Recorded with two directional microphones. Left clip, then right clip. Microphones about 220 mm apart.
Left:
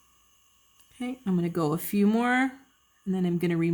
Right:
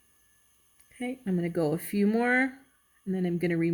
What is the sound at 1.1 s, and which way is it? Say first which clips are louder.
Speech: left 1 dB; 35° left (ahead or behind).